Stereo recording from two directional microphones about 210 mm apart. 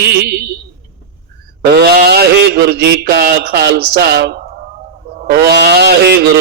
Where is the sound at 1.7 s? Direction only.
50° right (ahead or behind).